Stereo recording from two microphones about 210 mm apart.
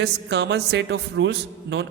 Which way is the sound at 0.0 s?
55° right (ahead or behind).